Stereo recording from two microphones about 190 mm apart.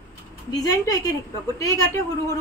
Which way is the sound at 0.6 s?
20° left (ahead or behind).